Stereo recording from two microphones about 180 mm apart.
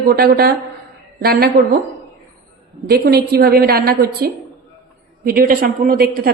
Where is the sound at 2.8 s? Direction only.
60° right (ahead or behind).